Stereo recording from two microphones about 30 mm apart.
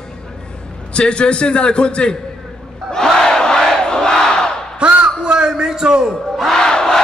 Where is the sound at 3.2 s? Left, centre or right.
Left.